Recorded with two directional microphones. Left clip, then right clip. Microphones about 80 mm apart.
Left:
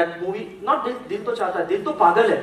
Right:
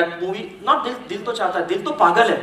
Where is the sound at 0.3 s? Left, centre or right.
Right.